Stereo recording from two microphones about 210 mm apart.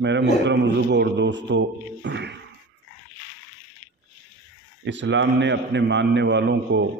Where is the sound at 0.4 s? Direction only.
55° right (ahead or behind).